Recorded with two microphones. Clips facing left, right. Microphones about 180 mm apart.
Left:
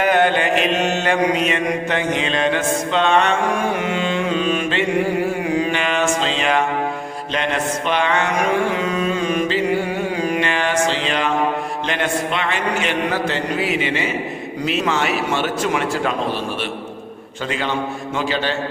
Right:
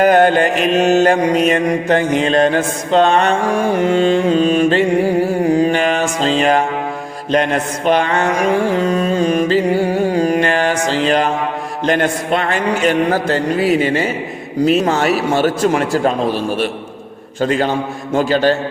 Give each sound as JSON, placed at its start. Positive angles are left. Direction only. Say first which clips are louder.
{"t": 0.0, "sound": "mantra", "louder": "right 6 dB", "side_deg": -40}
{"t": 17.4, "sound": "a man's voice", "louder": "right 7 dB", "side_deg": -40}